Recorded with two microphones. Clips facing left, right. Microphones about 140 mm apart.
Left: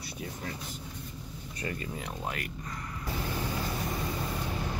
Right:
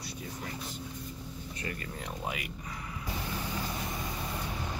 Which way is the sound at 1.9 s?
Centre (ahead or behind).